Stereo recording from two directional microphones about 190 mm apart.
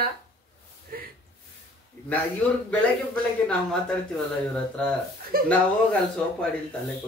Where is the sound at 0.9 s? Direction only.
50° right (ahead or behind).